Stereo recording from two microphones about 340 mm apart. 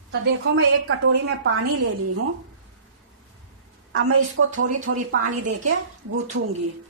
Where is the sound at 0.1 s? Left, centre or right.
Right.